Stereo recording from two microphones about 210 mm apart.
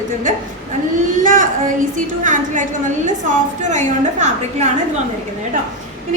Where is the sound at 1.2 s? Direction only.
40° right (ahead or behind).